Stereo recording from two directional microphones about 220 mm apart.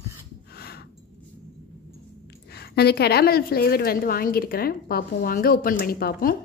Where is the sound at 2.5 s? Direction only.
45° left (ahead or behind).